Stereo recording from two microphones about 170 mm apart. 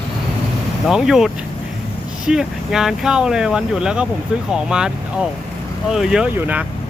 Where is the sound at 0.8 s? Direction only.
5° right (ahead or behind).